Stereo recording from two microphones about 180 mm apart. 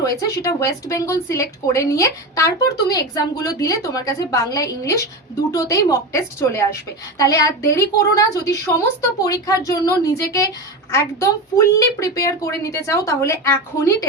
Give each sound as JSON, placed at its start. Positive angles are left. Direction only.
{"t": 0.0, "sound": "a woman's voice", "side_deg": 20}